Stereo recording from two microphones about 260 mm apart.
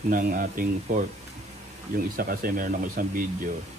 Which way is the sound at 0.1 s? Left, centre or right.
Right.